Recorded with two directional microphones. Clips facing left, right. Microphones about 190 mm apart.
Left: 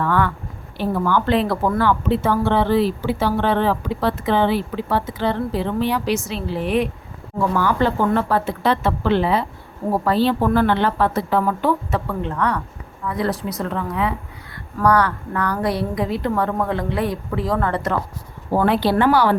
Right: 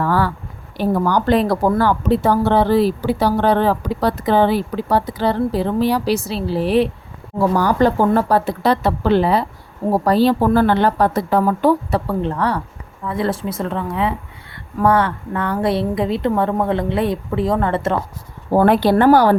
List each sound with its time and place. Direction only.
0.0 s a woman's voice: 35° right (ahead or behind)
18.5 s speech: 45° right (ahead or behind)